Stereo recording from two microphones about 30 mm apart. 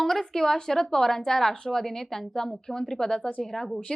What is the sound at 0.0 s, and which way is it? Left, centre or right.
A woman's voice, centre.